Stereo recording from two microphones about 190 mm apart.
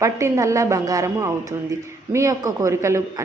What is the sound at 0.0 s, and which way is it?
Speech, 15° right (ahead or behind).